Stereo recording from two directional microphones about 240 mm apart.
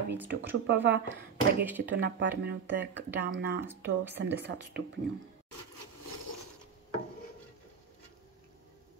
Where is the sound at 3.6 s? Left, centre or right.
Centre.